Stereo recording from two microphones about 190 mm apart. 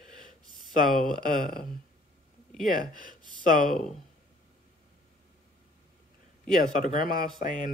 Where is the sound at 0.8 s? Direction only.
Centre (ahead or behind).